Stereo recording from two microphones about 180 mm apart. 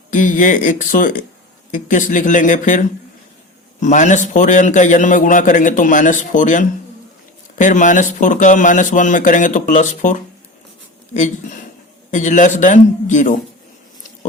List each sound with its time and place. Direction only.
0.1 s a man's voice: 45° left (ahead or behind)
12.1 s a man's voice: 45° left (ahead or behind)